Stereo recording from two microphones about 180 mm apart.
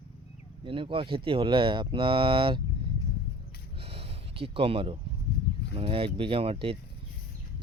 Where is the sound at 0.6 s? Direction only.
30° right (ahead or behind).